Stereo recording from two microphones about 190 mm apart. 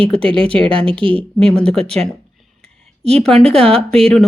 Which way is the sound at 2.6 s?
35° right (ahead or behind).